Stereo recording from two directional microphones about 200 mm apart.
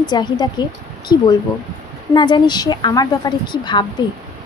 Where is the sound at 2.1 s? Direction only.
20° left (ahead or behind).